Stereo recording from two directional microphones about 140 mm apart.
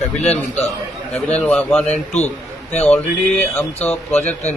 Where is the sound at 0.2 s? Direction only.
50° left (ahead or behind).